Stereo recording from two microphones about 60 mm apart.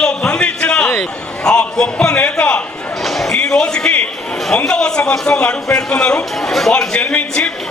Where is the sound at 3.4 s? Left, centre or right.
Centre.